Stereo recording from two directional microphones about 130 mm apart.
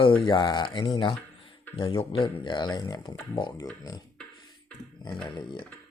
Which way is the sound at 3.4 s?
35° left (ahead or behind).